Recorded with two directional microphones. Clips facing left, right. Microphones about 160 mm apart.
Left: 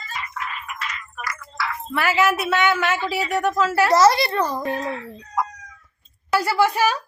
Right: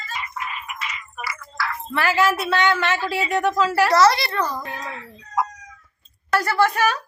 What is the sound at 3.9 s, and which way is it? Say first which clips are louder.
Speech: left 3 dB; 20° left (ahead or behind).